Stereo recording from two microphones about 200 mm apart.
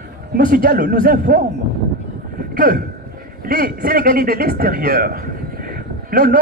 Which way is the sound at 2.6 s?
45° right (ahead or behind).